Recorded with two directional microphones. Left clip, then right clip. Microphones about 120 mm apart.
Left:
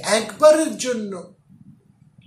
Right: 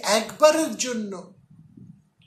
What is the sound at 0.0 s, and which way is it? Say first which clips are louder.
Speech: left 3 dB; 50° right (ahead or behind).